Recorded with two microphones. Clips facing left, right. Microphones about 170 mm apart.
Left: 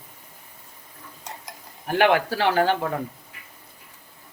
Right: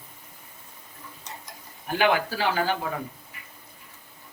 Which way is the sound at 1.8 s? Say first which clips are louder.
Left 4 dB; 70° left (ahead or behind).